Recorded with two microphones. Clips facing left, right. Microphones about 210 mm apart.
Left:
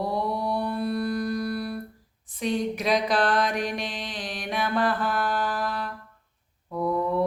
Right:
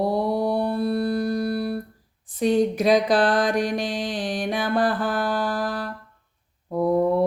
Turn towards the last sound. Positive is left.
turn(degrees=-35)  # may be behind; listen again after turning